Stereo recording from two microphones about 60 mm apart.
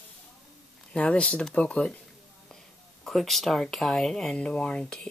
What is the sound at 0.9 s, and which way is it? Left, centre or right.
Speech, centre.